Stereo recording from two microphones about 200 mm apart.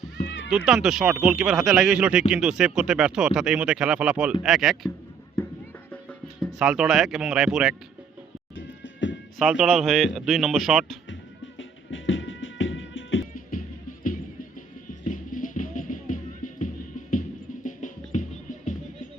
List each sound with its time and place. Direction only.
0.3 s horse: 65° left (ahead or behind)
0.5 s speech: 5° right (ahead or behind)
5.4 s a sound: 10° left (ahead or behind)
5.9 s speech: 5° left (ahead or behind)
8.5 s music: 65° left (ahead or behind)
9.4 s speech: centre (ahead or behind)
11.1 s music: 70° left (ahead or behind)
13.3 s music: 45° left (ahead or behind)